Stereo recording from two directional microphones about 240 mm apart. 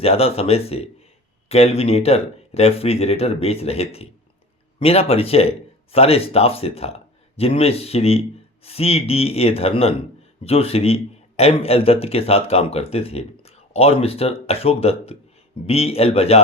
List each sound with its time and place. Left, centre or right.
0.0 s a man's voice: left